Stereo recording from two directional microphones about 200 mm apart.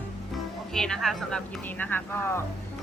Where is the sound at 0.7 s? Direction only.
5° left (ahead or behind).